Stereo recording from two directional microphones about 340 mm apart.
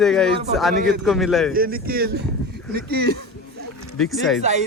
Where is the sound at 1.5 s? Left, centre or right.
Right.